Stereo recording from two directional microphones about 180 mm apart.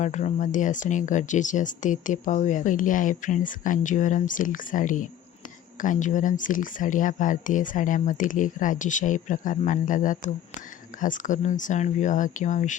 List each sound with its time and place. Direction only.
0.0 s speech: 40° left (ahead or behind)